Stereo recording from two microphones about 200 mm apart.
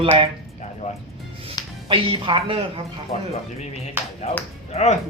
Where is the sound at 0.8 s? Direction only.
35° left (ahead or behind).